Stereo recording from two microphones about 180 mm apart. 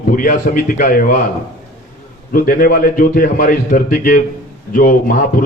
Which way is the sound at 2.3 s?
50° left (ahead or behind).